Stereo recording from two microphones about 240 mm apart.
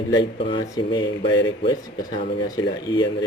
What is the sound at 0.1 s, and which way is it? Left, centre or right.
Speech, centre.